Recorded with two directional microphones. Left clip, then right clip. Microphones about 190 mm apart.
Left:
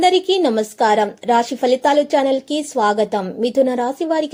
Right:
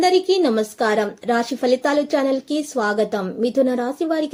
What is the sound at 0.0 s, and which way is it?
A woman's voice, 20° left (ahead or behind).